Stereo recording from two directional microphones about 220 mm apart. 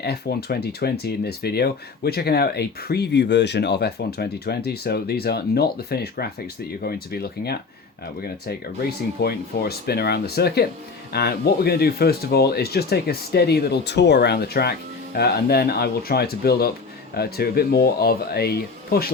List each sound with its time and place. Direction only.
0.0 s speech: 45° left (ahead or behind)